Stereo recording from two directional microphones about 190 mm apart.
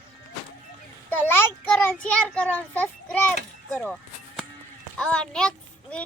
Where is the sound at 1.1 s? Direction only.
10° left (ahead or behind).